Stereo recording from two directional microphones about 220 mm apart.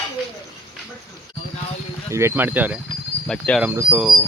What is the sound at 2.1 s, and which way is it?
Speech, 10° right (ahead or behind).